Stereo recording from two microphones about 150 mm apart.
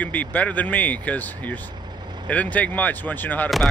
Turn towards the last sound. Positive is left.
turn(degrees=10)  # may be behind; listen again after turning